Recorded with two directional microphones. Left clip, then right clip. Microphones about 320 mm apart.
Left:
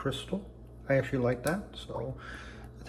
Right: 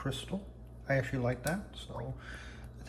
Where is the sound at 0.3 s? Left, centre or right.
Left.